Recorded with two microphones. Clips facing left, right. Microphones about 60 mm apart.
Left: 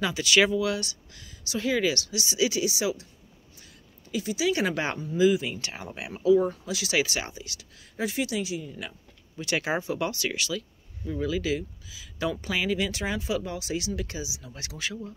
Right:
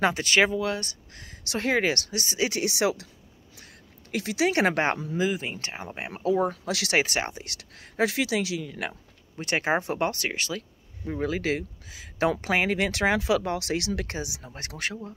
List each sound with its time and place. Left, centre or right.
0.0 s speech: right
3.5 s a sound: right
5.1 s speech: right
6.6 s speech: right
7.0 s speech: right
9.4 s speech: right